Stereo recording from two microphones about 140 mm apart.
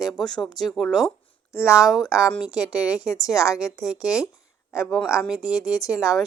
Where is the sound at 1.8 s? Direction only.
Centre (ahead or behind).